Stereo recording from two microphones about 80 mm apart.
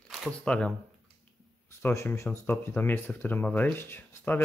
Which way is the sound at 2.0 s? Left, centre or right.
Left.